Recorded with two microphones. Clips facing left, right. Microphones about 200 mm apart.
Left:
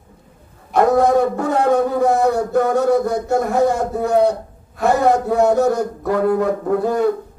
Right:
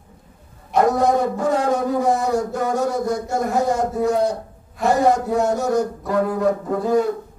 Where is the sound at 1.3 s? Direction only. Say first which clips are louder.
Left 3 dB; 60° left (ahead or behind).